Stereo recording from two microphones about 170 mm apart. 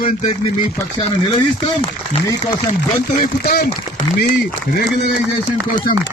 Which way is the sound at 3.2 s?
60° left (ahead or behind).